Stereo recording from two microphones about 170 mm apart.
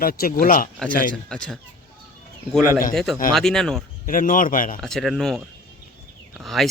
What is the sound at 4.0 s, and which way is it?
Speech, 50° left (ahead or behind).